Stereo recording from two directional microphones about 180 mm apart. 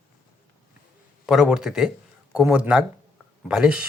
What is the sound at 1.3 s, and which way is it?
Speech, 5° right (ahead or behind).